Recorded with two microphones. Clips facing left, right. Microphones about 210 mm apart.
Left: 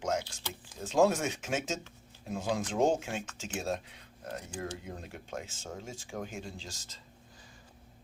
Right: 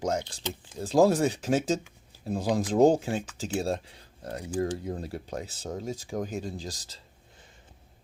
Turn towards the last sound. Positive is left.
turn(degrees=-35)  # may be behind; listen again after turning